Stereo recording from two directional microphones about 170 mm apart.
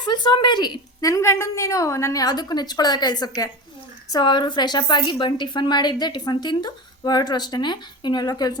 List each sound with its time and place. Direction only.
0.0 s a woman's voice: 25° left (ahead or behind)